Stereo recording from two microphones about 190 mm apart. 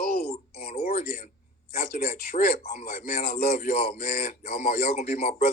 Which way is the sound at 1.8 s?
50° left (ahead or behind).